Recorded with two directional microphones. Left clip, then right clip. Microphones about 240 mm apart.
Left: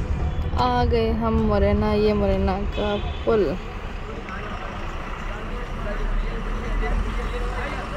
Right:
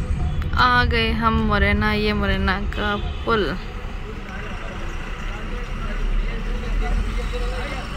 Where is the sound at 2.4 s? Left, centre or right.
Right.